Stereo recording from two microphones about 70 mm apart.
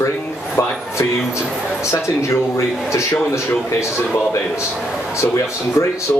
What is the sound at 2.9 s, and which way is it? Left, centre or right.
Speech, left.